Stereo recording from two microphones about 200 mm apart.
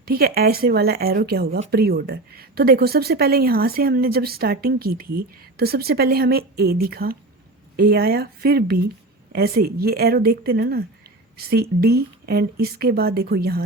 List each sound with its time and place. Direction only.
0.0 s a woman's voice: 50° right (ahead or behind)